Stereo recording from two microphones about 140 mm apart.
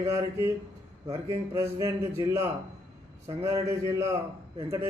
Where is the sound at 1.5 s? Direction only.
20° right (ahead or behind).